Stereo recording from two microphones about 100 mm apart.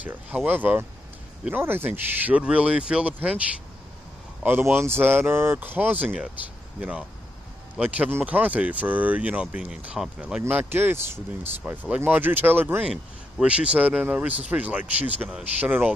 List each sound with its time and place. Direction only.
0.0 s speech: 15° right (ahead or behind)
4.5 s speech: 20° right (ahead or behind)
10.4 s speech: 25° right (ahead or behind)